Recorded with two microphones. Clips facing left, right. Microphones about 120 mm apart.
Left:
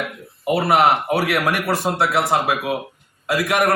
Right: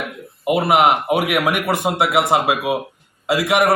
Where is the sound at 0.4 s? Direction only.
15° right (ahead or behind).